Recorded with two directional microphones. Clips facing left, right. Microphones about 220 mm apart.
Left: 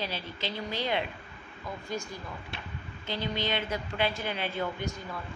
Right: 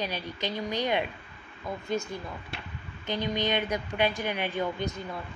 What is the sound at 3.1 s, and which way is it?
A woman's voice, 15° right (ahead or behind).